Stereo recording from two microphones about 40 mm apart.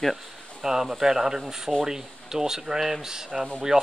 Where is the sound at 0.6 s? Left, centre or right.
Centre.